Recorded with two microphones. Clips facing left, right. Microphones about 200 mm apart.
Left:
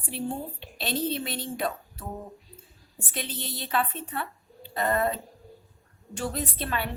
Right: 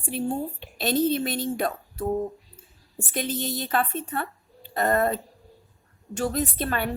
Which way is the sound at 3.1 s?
45° right (ahead or behind).